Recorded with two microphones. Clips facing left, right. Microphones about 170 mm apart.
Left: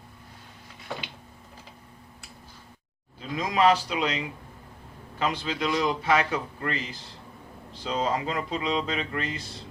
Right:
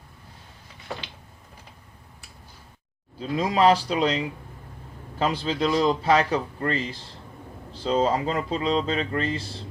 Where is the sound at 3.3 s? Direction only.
35° right (ahead or behind).